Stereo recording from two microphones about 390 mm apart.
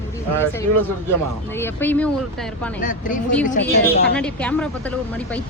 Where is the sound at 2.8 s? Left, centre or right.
Centre.